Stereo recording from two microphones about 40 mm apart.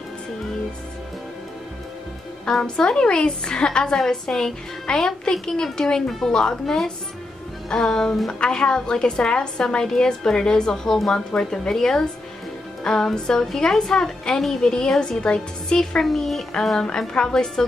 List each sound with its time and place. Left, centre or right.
2.6 s a woman's voice: centre
6.6 s a woman's voice: centre
7.7 s a woman's voice: centre
16.0 s a woman's voice: centre
17.1 s speech: centre